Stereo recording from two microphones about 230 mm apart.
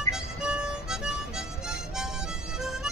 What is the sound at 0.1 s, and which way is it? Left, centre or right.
Harmonica, centre.